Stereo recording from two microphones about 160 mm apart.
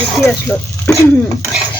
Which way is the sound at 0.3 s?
5° left (ahead or behind).